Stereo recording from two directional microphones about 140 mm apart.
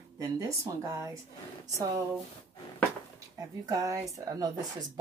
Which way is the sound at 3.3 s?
25° right (ahead or behind).